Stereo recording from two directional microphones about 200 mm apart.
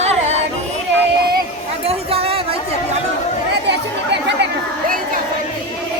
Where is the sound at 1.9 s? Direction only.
30° right (ahead or behind).